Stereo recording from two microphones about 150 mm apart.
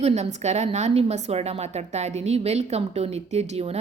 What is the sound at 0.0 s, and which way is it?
Speech, 45° right (ahead or behind).